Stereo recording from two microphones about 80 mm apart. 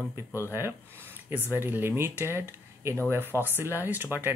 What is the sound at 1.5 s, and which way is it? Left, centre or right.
Speech, right.